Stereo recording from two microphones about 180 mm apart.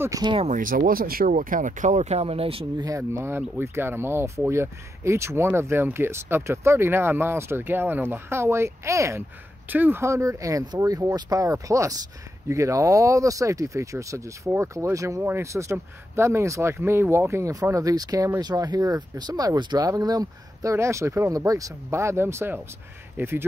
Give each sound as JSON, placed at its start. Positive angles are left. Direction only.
{"t": 0.0, "sound": "speech", "side_deg": -20}
{"t": 0.5, "sound": "speech", "side_deg": -50}
{"t": 3.3, "sound": "speech", "side_deg": -15}